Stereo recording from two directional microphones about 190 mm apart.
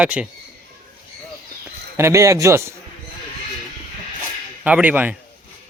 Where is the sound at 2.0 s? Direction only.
15° right (ahead or behind).